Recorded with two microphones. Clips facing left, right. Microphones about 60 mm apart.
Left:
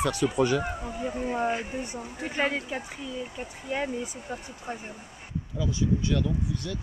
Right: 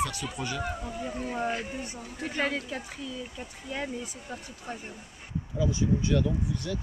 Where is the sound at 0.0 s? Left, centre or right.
Left.